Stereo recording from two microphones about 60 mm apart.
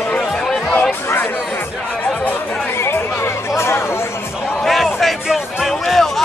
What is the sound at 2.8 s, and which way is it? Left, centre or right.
Chatter, left.